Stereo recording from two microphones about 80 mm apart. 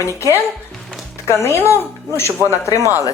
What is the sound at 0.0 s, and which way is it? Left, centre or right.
Speech, left.